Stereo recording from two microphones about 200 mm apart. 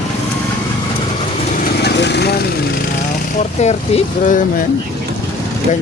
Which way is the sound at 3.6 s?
35° left (ahead or behind).